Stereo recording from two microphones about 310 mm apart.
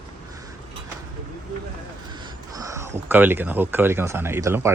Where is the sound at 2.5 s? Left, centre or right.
Centre.